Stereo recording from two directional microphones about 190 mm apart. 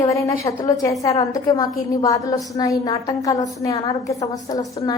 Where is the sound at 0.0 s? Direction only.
15° left (ahead or behind).